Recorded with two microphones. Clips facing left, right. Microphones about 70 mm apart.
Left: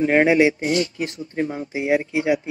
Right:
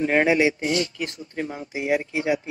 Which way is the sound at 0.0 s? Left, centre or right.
Left.